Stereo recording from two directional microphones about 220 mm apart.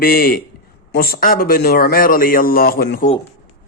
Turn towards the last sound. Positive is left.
turn(degrees=40)  # may be behind; listen again after turning